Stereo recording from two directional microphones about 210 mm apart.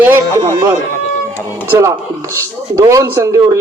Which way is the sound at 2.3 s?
15° right (ahead or behind).